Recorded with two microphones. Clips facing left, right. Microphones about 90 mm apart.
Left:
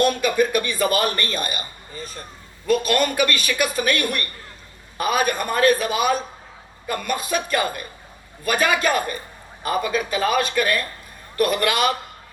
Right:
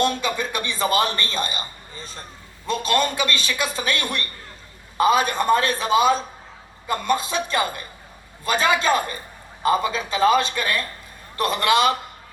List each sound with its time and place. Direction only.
0.0 s speech: 25° right (ahead or behind)
2.6 s speech: 25° right (ahead or behind)